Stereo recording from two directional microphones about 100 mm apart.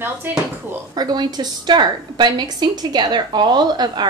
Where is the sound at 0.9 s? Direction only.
45° right (ahead or behind).